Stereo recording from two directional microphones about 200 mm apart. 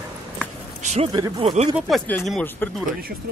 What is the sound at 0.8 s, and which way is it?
Speech, 35° right (ahead or behind).